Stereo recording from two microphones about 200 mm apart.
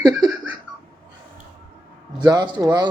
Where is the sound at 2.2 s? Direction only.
20° right (ahead or behind).